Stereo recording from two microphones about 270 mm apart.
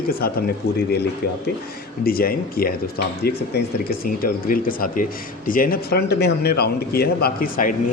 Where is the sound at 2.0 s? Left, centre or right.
Left.